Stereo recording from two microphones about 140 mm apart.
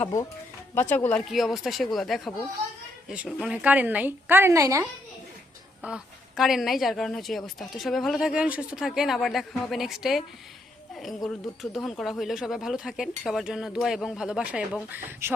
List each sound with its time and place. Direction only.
0.0 s speech: 25° left (ahead or behind)
1.3 s speech: centre (ahead or behind); by 4.9 s 20° right (ahead or behind)
5.8 s speech: 5° right (ahead or behind)